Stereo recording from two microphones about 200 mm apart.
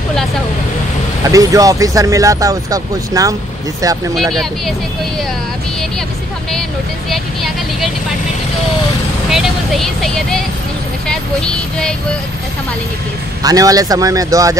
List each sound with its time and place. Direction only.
1.3 s speech: 15° right (ahead or behind)
4.1 s speech: centre (ahead or behind)
7.1 s speech: centre (ahead or behind)
9.3 s speech: centre (ahead or behind)
13.4 s speech: 20° right (ahead or behind)